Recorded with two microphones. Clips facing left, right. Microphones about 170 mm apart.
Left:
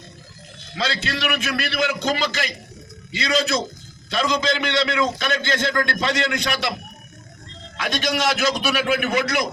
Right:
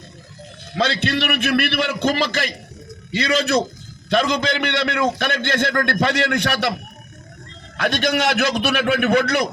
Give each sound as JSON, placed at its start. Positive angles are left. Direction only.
{"t": 0.8, "sound": "a man's voice", "side_deg": -60}
{"t": 7.8, "sound": "a man's voice", "side_deg": -60}